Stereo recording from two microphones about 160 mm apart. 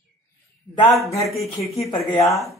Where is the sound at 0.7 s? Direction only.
20° left (ahead or behind).